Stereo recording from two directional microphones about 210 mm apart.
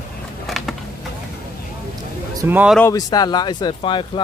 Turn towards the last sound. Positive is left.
turn(degrees=25)  # may be behind; listen again after turning